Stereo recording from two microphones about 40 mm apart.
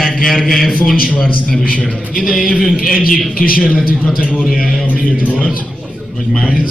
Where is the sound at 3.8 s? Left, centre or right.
Centre.